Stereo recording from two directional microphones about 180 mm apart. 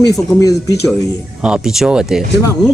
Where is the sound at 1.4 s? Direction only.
5° right (ahead or behind).